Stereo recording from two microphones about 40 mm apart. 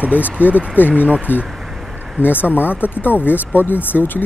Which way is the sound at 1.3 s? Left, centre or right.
Left.